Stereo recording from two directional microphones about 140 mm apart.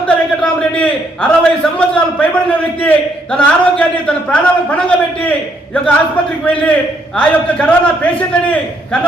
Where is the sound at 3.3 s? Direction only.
10° left (ahead or behind).